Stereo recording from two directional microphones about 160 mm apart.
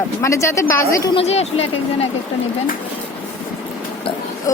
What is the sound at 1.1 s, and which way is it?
Speech, 40° left (ahead or behind).